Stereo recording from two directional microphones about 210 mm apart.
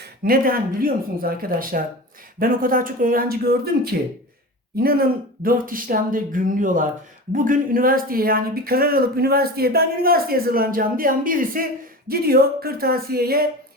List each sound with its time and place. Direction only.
0.3 s speech: 45° right (ahead or behind)